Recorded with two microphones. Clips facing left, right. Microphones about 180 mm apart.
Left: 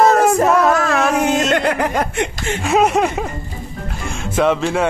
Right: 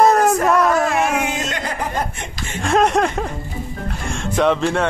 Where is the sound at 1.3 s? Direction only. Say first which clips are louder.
Left 9 dB; 70° left (ahead or behind); by 2.5 s 85° left.